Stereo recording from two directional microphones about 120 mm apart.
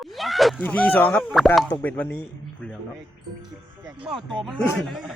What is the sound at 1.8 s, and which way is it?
Speech, 15° left (ahead or behind).